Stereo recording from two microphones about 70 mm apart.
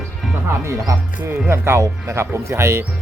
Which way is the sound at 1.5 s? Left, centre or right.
Right.